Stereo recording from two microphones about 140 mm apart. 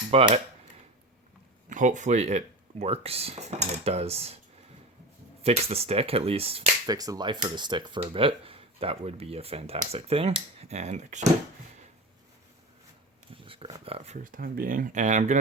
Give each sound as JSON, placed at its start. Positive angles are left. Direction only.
{"t": 0.1, "sound": "speech", "side_deg": -45}
{"t": 1.7, "sound": "speech", "side_deg": -65}
{"t": 5.4, "sound": "speech", "side_deg": -45}
{"t": 6.8, "sound": "speech", "side_deg": -25}
{"t": 13.3, "sound": "a sound", "side_deg": -40}
{"t": 13.8, "sound": "speech", "side_deg": -45}
{"t": 14.3, "sound": "speech", "side_deg": -85}